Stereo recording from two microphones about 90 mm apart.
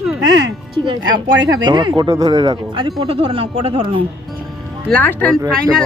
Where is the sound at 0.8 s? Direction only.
55° right (ahead or behind).